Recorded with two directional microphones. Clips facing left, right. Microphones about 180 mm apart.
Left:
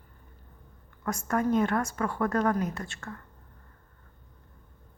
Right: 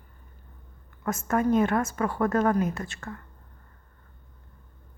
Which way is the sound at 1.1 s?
20° right (ahead or behind).